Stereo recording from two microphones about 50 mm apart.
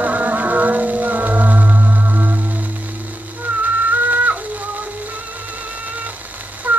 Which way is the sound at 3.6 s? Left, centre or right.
Right.